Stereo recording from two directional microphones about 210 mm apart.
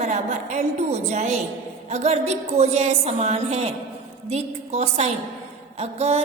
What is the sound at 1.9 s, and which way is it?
A woman's voice, 30° right (ahead or behind).